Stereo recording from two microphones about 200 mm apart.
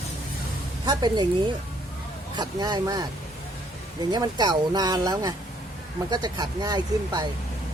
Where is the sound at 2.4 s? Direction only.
20° right (ahead or behind).